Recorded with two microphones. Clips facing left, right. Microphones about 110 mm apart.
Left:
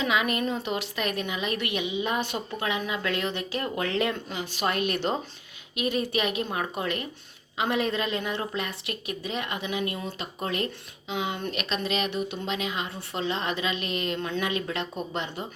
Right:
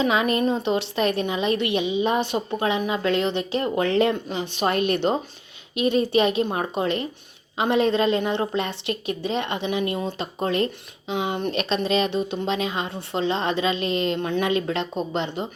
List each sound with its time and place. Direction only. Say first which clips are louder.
0.0 s a woman's voice: right 5 dB; 30° right (ahead or behind)